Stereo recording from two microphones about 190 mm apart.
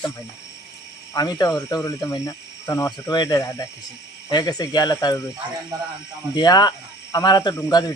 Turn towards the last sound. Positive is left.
turn(degrees=20)  # may be behind; listen again after turning